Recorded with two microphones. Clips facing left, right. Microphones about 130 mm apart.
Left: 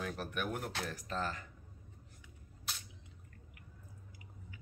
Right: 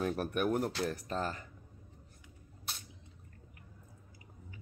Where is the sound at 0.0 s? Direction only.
45° right (ahead or behind).